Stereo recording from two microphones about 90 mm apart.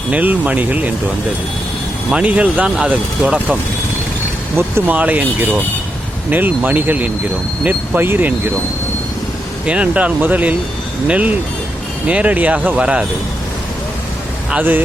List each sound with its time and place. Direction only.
0.1 s speech: 15° right (ahead or behind)
2.0 s speech: 15° right (ahead or behind)
9.6 s speech: 15° right (ahead or behind)
14.5 s speech: 20° right (ahead or behind)